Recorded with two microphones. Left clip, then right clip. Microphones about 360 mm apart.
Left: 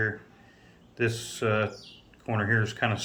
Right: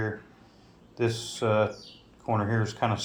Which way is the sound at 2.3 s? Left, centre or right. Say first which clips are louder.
Left 1 dB; centre.